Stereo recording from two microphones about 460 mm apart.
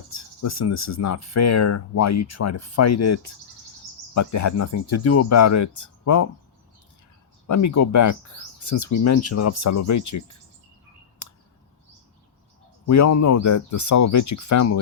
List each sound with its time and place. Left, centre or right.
0.1 s speech: left
7.4 s speech: left
12.9 s speech: left